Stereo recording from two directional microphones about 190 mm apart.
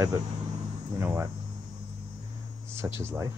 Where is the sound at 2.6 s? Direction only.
15° right (ahead or behind).